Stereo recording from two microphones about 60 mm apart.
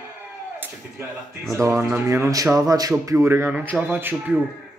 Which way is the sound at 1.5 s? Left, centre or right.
Right.